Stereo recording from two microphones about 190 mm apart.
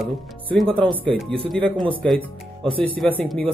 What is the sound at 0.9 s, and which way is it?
Speech, 25° right (ahead or behind).